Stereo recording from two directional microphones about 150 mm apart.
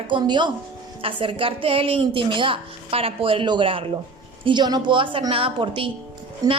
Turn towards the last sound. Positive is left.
turn(degrees=-25)  # may be behind; listen again after turning